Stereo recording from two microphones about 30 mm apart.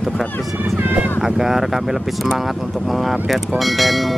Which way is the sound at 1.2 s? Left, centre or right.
Centre.